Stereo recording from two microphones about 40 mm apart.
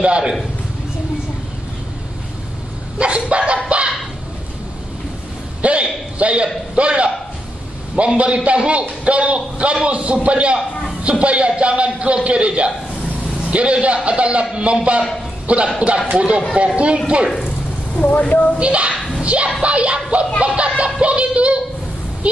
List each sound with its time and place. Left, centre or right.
0.0 s a man's voice: right
3.0 s bow-wow: right
5.6 s a man's voice: right
13.2 s vehicle: right
14.0 s a man's voice: right
17.9 s speech: left
18.6 s a man's voice: right
18.9 s a sound: centre
19.2 s a man's voice: right